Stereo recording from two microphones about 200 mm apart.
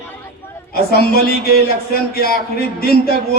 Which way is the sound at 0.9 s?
50° left (ahead or behind).